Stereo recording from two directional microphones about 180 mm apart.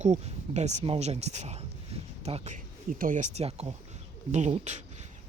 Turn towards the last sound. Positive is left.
turn(degrees=-40)  # may be behind; listen again after turning